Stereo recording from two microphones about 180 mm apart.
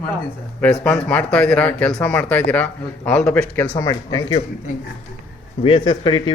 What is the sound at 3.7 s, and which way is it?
Speech, 20° left (ahead or behind).